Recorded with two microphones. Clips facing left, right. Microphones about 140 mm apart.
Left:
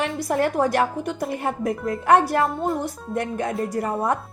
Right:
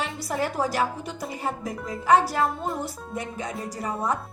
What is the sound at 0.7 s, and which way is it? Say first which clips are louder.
Speech: left 5 dB; 55° left (ahead or behind).